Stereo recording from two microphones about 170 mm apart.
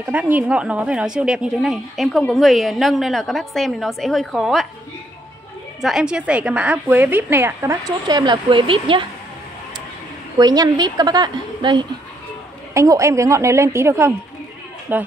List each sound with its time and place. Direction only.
0.0 s a woman's voice: 10° right (ahead or behind)
5.8 s a woman's voice: centre (ahead or behind); by 9.0 s 30° right (ahead or behind)
10.4 s a woman's voice: 25° right (ahead or behind)